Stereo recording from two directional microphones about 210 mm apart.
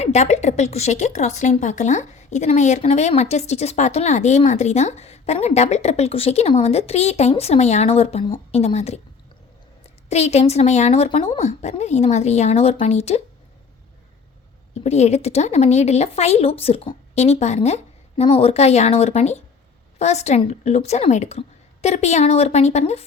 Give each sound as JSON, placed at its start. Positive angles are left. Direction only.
{"t": 0.0, "sound": "a woman's voice", "side_deg": 30}
{"t": 10.1, "sound": "a woman's voice", "side_deg": 30}
{"t": 14.8, "sound": "a woman's voice", "side_deg": 30}